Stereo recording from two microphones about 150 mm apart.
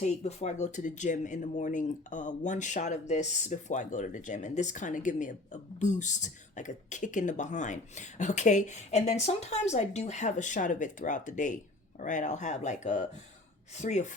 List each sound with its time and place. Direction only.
0.0 s speech: 45° left (ahead or behind)